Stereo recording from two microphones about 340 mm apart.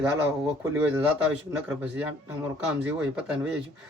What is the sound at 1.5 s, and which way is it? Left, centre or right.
Speech, centre.